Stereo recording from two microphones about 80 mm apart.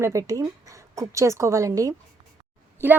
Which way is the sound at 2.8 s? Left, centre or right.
Right.